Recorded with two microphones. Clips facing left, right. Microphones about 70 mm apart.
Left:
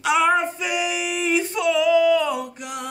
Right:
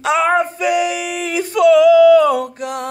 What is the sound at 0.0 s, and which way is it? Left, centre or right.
Male singing, right.